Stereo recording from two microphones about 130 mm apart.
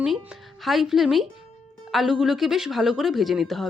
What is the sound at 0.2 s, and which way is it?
Speech, 5° right (ahead or behind).